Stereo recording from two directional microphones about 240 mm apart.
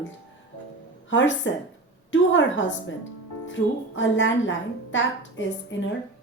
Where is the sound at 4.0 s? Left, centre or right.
Left.